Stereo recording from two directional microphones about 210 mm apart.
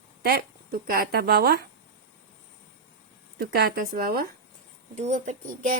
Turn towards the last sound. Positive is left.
turn(degrees=-35)  # may be behind; listen again after turning